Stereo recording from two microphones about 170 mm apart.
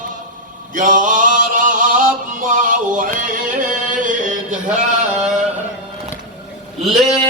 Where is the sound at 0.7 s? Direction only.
50° right (ahead or behind).